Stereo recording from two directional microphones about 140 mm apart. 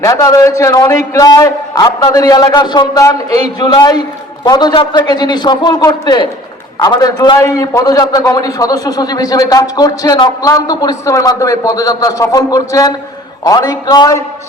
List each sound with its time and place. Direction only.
0.0 s a man's voice: 25° left (ahead or behind)